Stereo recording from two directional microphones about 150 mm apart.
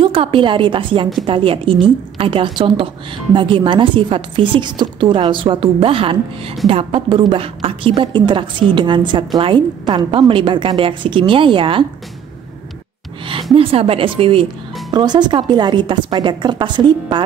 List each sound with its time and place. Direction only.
0.0 s a woman's voice: 35° right (ahead or behind)
13.6 s a woman's voice: 40° right (ahead or behind)